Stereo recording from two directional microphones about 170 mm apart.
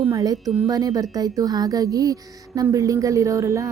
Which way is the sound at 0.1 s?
20° right (ahead or behind).